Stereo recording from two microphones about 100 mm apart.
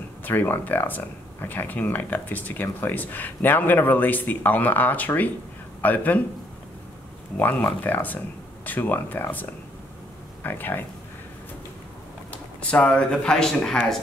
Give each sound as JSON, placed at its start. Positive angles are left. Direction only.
{"t": 0.2, "sound": "speech", "side_deg": 20}
{"t": 7.3, "sound": "speech", "side_deg": 15}
{"t": 12.3, "sound": "speech", "side_deg": 15}